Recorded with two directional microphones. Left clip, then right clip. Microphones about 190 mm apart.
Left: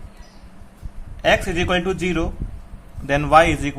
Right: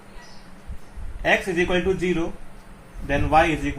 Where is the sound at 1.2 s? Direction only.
50° left (ahead or behind).